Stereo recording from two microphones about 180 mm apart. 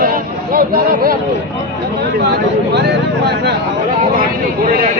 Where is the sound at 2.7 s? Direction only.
65° right (ahead or behind).